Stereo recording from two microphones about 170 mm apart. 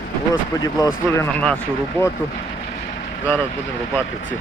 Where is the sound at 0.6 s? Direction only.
20° left (ahead or behind).